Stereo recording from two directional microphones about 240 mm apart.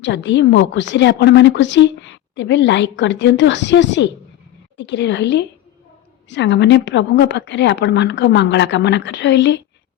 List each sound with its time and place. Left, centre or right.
0.0 s a woman's voice: left